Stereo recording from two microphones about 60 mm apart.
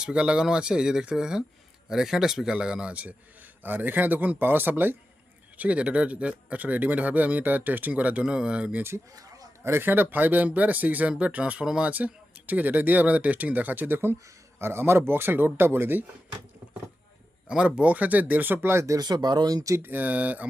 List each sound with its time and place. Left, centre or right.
0.0 s speech: centre
2.9 s speech: right
5.5 s speech: right
9.1 s a sound: right
9.6 s speech: right
11.6 s speech: centre
11.9 s speech: right
17.5 s speech: centre; by 18.9 s right
19.5 s speech: right
19.7 s speech: right